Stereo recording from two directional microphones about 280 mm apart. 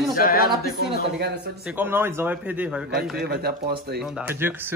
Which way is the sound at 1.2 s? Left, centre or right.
Right.